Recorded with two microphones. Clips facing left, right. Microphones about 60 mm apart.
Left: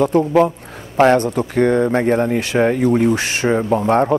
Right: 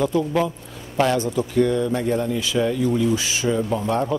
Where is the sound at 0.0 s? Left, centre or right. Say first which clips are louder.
Left 7 dB; left.